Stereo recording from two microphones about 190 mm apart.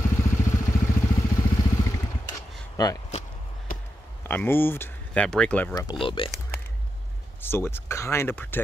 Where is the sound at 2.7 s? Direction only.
20° left (ahead or behind).